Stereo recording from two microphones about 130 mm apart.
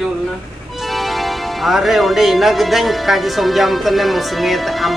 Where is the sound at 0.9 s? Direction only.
Centre (ahead or behind).